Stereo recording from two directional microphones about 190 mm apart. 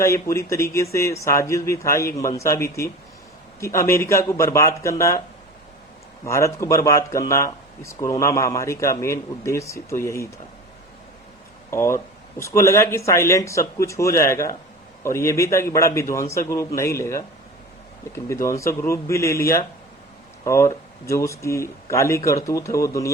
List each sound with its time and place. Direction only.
0.0 s speech: 15° left (ahead or behind)
6.2 s speech: 15° left (ahead or behind)
11.7 s speech: 15° left (ahead or behind)